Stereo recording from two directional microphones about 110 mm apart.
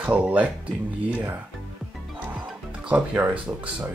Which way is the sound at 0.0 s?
15° right (ahead or behind).